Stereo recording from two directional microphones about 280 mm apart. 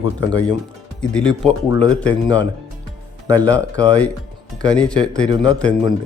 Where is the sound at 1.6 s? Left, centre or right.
Centre.